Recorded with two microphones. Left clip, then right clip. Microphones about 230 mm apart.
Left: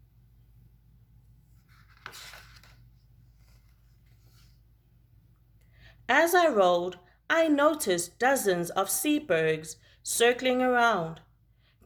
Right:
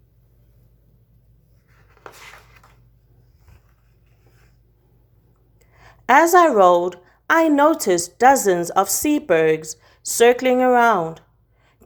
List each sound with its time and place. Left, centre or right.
5.5 s speech: right